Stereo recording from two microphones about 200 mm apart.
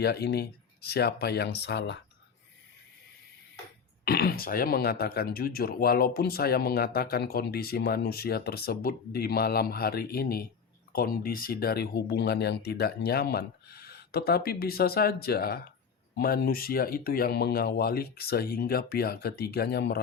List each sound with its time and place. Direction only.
0.0 s speech: 55° left (ahead or behind)
4.0 s speech: 50° left (ahead or behind)